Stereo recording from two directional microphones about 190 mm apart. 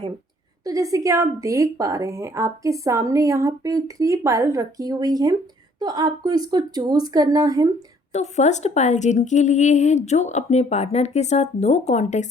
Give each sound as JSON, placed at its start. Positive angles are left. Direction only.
{"t": 0.6, "sound": "speech", "side_deg": -20}
{"t": 8.1, "sound": "a woman's voice", "side_deg": 35}